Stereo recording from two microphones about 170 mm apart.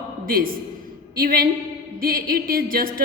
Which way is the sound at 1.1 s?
60° right (ahead or behind).